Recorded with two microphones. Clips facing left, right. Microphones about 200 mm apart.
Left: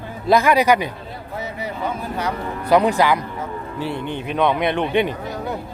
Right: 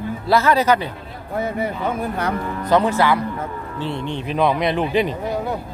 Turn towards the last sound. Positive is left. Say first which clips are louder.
# right 3 dB
turn(degrees=0)  # may be behind; listen again after turning